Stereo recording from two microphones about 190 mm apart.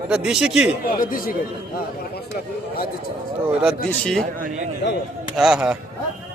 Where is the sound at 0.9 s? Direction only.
45° left (ahead or behind).